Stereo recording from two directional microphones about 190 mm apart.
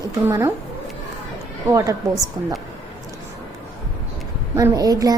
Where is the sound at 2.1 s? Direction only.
Centre (ahead or behind).